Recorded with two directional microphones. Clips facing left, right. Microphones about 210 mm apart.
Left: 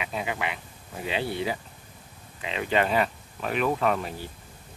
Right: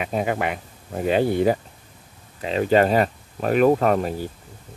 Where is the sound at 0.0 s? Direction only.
45° right (ahead or behind).